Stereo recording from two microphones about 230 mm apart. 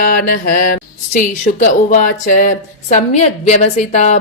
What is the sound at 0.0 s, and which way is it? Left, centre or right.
A woman's voice, left.